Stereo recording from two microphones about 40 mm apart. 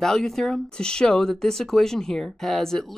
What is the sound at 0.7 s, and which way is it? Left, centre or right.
Speech, centre.